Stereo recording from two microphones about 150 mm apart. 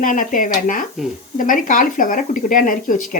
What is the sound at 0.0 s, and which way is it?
Speech, 65° left (ahead or behind).